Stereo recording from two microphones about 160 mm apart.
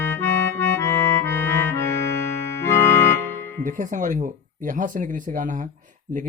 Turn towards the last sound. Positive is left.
turn(degrees=-55)  # may be behind; listen again after turning